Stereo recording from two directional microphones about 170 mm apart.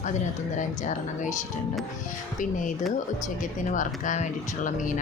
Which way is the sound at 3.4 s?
50° left (ahead or behind).